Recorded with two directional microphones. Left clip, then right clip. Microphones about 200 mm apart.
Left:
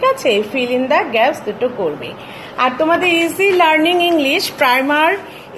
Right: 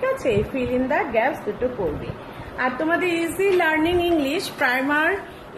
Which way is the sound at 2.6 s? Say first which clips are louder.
Left 8 dB; 5° right (ahead or behind).